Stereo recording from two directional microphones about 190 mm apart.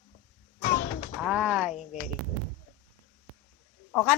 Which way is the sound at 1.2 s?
5° right (ahead or behind).